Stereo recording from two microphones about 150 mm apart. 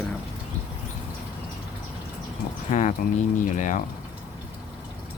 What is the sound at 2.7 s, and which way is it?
Speech, 50° left (ahead or behind).